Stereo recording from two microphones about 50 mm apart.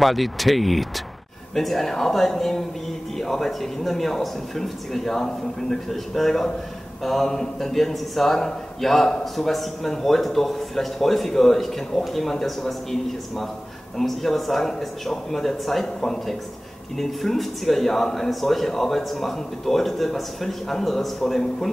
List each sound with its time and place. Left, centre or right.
0.0 s a man's voice: centre
13.9 s a man's voice: centre